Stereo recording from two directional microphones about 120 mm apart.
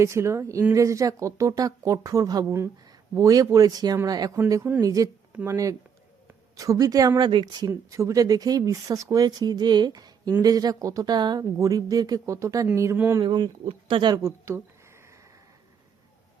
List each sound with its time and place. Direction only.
0.0 s speech: 25° right (ahead or behind)
7.7 s speech: 25° right (ahead or behind)
13.2 s speech: 40° right (ahead or behind)
14.1 s speech: 25° right (ahead or behind)